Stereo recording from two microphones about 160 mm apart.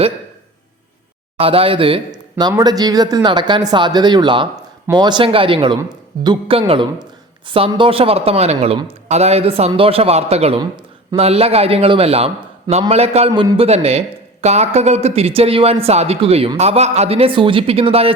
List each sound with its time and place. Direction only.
1.4 s speech: 35° right (ahead or behind)
2.5 s speech: 25° right (ahead or behind); by 10.6 s 40° right (ahead or behind)
10.6 s a sound: 25° right (ahead or behind)
11.2 s speech: 40° right (ahead or behind)